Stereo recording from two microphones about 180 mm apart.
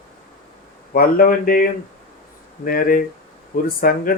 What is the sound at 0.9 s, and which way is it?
Speech, 50° left (ahead or behind).